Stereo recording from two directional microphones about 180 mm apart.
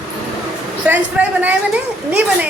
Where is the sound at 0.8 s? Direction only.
10° right (ahead or behind).